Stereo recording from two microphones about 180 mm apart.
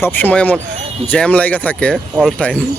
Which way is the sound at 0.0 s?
10° left (ahead or behind).